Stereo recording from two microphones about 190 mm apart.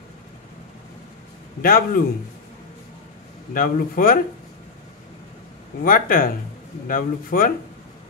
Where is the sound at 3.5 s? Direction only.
50° left (ahead or behind).